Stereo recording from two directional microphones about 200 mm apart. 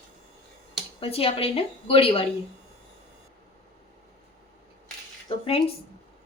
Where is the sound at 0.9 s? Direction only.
30° left (ahead or behind).